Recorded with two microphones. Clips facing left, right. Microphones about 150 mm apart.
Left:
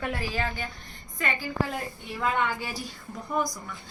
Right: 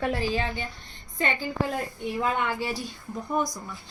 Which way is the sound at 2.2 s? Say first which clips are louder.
Even; 25° right (ahead or behind).